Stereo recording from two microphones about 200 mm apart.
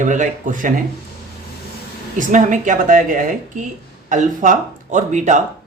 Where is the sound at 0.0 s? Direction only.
40° right (ahead or behind).